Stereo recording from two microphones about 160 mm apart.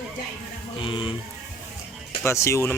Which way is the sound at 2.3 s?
15° left (ahead or behind).